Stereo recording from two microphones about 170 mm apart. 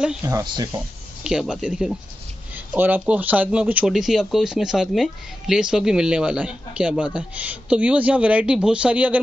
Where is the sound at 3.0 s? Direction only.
10° right (ahead or behind).